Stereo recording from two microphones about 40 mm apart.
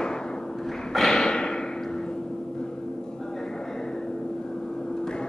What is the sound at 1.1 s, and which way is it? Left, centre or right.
Whip, centre.